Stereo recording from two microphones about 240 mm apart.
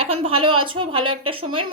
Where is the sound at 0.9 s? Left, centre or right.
Right.